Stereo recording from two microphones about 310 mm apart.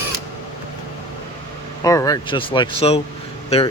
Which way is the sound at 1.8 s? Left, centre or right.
Centre.